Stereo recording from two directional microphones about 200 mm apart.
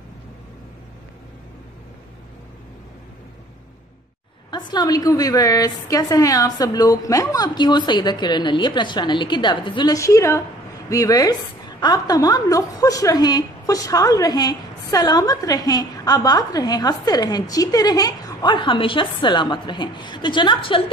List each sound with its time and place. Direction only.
4.5 s a woman's voice: 20° left (ahead or behind)